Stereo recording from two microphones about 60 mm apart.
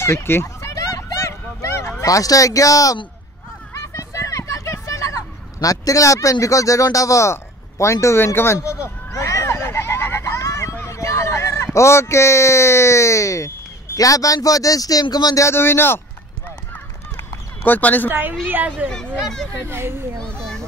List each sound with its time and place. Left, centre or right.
0.0 s speech: left
0.7 s fowl: left
2.0 s speech: left
3.7 s a sound: left
8.4 s speech: left
8.8 s a sound: left
10.9 s a man's voice: left
13.9 s speech: left
15.4 s a man's voice: left
17.6 s speech: left
18.0 s a child's voice: right
19.7 s a child's voice: right
20.2 s a child's voice: centre